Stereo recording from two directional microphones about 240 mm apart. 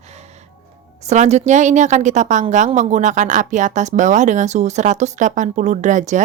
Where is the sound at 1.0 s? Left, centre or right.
Right.